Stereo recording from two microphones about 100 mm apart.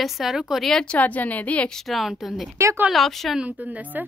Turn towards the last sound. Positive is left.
turn(degrees=-15)  # may be behind; listen again after turning